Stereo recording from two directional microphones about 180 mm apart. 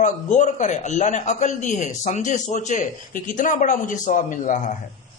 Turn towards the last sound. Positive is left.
turn(degrees=45)  # may be behind; listen again after turning